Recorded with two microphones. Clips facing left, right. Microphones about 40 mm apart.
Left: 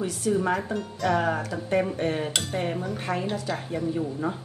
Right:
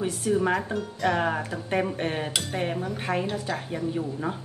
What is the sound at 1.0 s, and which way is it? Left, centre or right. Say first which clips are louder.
Speech: left 1 dB; right.